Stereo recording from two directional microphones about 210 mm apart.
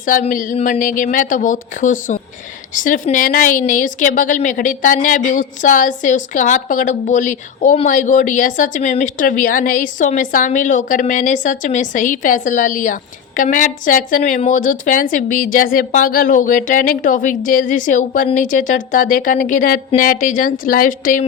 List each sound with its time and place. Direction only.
0.0 s a woman's voice: 40° left (ahead or behind)